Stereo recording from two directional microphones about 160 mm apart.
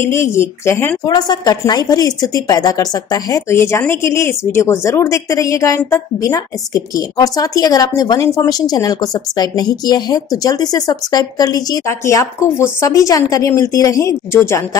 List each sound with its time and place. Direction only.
0.0 s a woman's voice: 15° left (ahead or behind)